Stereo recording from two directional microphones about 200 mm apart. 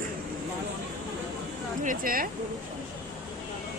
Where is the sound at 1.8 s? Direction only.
40° right (ahead or behind).